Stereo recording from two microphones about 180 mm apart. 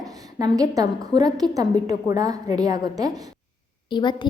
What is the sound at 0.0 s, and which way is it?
A woman's voice, 20° right (ahead or behind).